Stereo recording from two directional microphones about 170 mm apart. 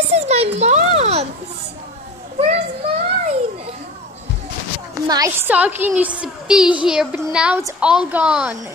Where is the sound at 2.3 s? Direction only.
40° right (ahead or behind).